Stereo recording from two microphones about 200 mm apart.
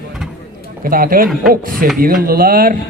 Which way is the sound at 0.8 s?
45° right (ahead or behind).